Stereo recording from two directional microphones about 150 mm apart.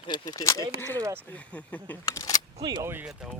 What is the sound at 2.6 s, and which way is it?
Speech, 20° right (ahead or behind).